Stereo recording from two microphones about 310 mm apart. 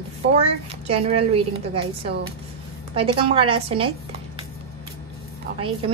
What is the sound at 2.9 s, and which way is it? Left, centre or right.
A woman's voice, centre.